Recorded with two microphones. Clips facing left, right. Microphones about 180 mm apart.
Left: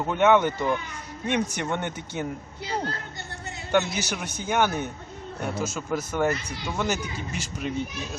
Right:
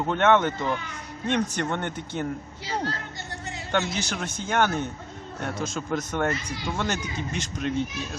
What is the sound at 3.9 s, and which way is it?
Speech, 10° left (ahead or behind).